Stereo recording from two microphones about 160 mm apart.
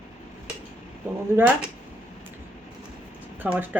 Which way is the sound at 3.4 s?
10° right (ahead or behind).